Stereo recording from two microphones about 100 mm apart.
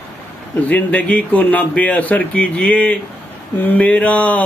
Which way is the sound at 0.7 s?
15° left (ahead or behind).